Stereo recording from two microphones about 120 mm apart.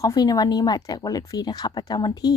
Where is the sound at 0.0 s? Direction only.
30° left (ahead or behind).